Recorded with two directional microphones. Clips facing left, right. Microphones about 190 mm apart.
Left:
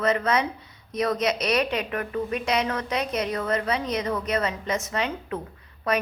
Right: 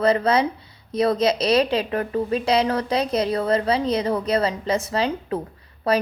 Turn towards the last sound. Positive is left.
turn(degrees=-30)  # may be behind; listen again after turning